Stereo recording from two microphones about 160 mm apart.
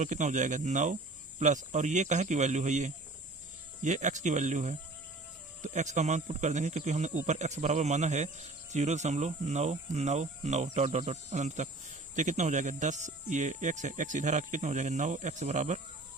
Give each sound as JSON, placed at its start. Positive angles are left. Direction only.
{"t": 0.0, "sound": "speech", "side_deg": -50}